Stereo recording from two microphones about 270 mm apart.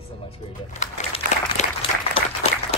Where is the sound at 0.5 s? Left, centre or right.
Left.